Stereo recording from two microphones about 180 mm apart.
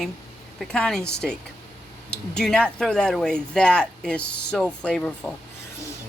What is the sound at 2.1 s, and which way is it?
Speech, 5° left (ahead or behind).